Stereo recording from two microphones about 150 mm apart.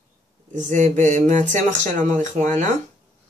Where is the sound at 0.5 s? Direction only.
55° right (ahead or behind).